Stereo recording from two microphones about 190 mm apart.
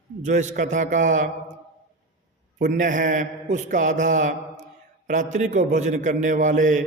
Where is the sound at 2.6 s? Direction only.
45° right (ahead or behind).